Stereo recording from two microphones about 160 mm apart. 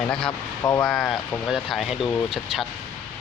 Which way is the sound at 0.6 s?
20° left (ahead or behind).